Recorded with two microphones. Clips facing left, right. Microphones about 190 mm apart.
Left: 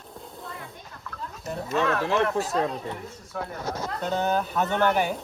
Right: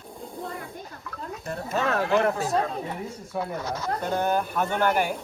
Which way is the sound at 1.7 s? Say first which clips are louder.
Even; 40° right (ahead or behind).